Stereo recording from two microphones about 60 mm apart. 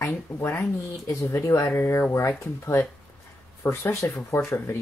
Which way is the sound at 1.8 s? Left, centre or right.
Left.